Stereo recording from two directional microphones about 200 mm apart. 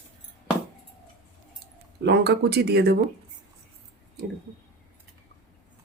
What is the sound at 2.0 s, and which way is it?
Speech, 55° right (ahead or behind).